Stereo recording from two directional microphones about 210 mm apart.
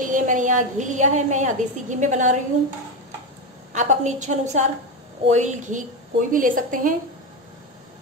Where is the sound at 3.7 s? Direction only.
35° right (ahead or behind).